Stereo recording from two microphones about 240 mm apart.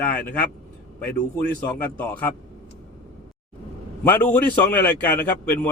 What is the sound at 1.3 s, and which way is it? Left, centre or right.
Speech, centre.